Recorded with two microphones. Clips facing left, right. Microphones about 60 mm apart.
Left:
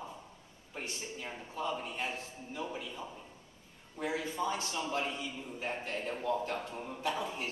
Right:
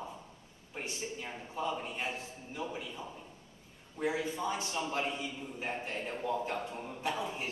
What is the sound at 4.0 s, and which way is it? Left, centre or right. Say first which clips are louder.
A man's voice: right 1 dB; centre.